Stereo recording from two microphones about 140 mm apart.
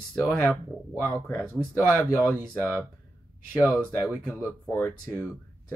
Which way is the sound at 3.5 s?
15° right (ahead or behind).